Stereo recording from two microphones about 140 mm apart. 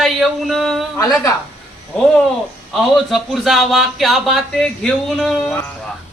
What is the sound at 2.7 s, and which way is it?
Speech, centre (ahead or behind).